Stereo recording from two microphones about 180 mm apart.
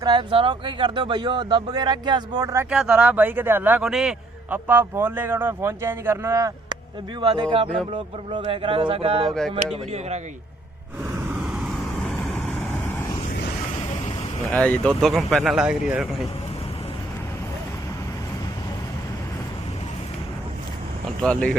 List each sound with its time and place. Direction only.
0.0 s speech: 25° right (ahead or behind)
2.6 s a man's voice: 5° right (ahead or behind); by 10.2 s 40° right (ahead or behind)
11.1 s vehicle: 5° right (ahead or behind); by 13.1 s 10° left (ahead or behind)
14.4 s speech: 5° left (ahead or behind)
21.2 s speech: 5° left (ahead or behind)